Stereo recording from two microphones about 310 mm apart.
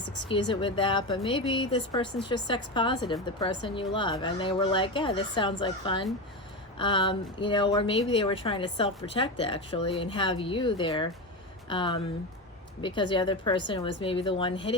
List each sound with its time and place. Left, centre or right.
0.3 s speech: centre